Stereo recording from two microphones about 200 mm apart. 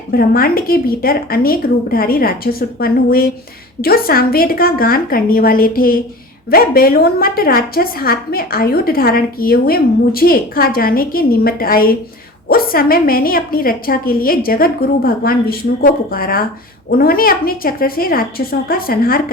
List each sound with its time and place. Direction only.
0.1 s a woman's voice: 50° left (ahead or behind)